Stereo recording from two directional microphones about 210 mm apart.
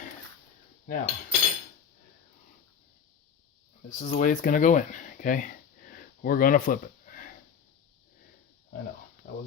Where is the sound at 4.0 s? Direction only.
35° left (ahead or behind).